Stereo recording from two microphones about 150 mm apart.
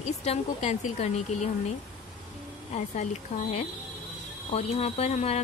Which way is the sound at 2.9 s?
50° left (ahead or behind).